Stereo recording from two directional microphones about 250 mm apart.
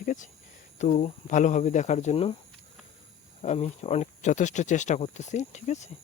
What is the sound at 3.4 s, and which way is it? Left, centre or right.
Speech, left.